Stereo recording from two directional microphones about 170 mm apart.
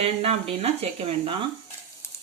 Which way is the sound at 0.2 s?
35° right (ahead or behind).